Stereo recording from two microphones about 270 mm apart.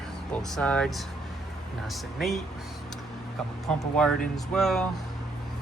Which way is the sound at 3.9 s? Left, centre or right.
Centre.